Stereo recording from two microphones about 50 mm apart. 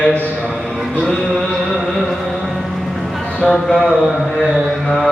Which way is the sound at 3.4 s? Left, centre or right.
Centre.